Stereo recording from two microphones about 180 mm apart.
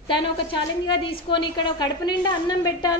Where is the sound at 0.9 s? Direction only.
25° left (ahead or behind).